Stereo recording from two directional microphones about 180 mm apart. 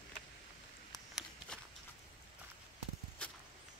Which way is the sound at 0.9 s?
Centre (ahead or behind).